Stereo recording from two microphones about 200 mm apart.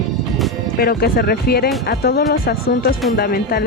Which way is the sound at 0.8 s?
50° left (ahead or behind).